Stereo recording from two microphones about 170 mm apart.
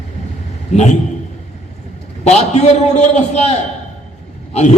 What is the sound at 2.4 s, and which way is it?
A man's voice, 40° left (ahead or behind).